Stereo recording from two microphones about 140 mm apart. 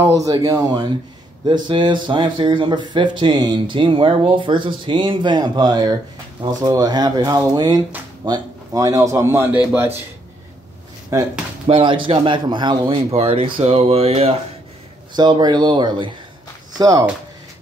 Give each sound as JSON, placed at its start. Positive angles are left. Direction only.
{"t": 0.0, "sound": "a man's voice", "side_deg": -25}
{"t": 11.6, "sound": "speech", "side_deg": -35}
{"t": 15.1, "sound": "speech", "side_deg": -30}